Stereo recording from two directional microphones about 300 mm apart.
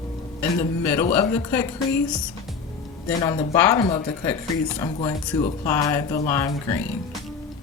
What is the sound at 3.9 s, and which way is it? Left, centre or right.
Speech, centre.